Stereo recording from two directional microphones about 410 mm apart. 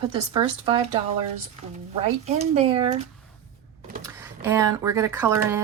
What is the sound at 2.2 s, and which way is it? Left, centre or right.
Speech, centre.